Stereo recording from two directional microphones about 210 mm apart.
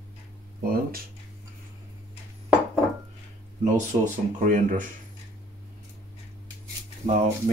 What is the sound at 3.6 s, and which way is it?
Speech, 35° right (ahead or behind).